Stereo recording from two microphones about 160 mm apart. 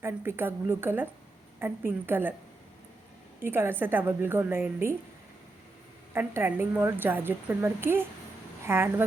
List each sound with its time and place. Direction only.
0.0 s a woman's voice: 15° right (ahead or behind)
3.4 s a woman's voice: 15° right (ahead or behind)
6.1 s a woman's voice: 15° right (ahead or behind)